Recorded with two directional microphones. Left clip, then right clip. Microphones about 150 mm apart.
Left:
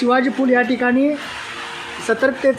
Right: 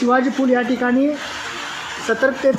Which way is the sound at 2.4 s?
50° right (ahead or behind).